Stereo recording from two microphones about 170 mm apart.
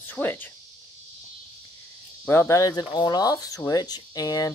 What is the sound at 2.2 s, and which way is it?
Speech, 15° left (ahead or behind).